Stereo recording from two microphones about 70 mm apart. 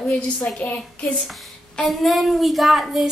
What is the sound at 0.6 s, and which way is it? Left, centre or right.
Speech, centre.